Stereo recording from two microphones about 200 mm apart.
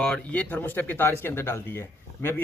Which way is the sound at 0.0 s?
5° left (ahead or behind).